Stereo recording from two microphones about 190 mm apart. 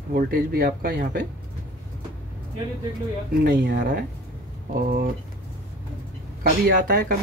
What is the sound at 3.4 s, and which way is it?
Speech, 55° right (ahead or behind).